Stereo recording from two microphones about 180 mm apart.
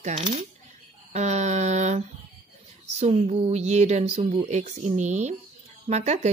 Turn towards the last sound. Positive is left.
turn(degrees=-40)  # may be behind; listen again after turning